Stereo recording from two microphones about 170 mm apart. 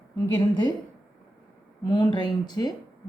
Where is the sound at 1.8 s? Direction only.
25° left (ahead or behind).